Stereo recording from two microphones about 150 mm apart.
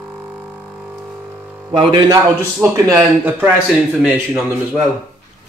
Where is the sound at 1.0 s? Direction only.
10° right (ahead or behind).